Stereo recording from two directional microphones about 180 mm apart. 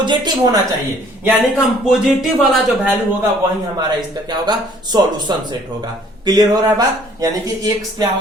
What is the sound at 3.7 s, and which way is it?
Speech, 25° right (ahead or behind).